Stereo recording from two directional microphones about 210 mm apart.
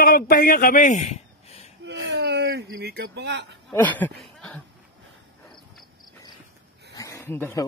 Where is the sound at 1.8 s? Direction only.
55° right (ahead or behind).